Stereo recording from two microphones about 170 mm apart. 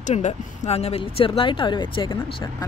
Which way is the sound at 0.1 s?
40° left (ahead or behind).